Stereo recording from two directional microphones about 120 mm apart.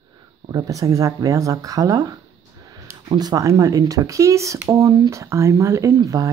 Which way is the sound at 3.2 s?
30° right (ahead or behind).